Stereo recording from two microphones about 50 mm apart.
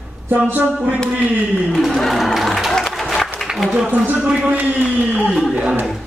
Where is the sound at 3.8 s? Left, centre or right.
Right.